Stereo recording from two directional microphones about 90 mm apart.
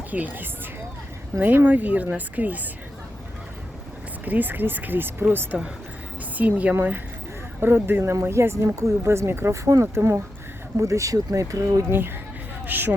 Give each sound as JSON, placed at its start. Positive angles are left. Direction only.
{"t": 0.1, "sound": "speech", "side_deg": -20}
{"t": 4.3, "sound": "a woman's voice", "side_deg": -20}